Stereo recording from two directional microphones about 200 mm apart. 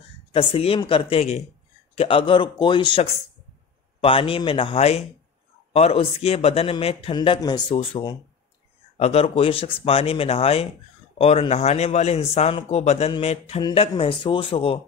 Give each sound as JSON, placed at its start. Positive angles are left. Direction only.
{"t": 0.3, "sound": "a man's voice", "side_deg": 30}